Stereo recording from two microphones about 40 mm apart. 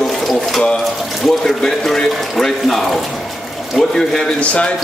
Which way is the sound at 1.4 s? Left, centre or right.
Centre.